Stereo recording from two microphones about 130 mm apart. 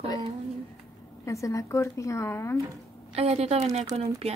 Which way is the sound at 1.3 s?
25° left (ahead or behind).